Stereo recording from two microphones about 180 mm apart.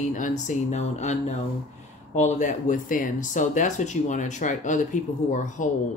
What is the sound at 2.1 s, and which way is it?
Speech, 40° left (ahead or behind).